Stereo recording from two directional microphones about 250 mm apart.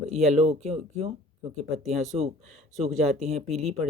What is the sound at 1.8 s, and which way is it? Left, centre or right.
Speech, centre.